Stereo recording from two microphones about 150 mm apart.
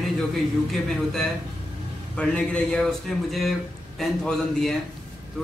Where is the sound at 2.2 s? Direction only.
10° left (ahead or behind).